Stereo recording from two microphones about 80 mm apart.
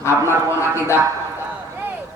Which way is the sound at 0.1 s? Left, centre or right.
Centre.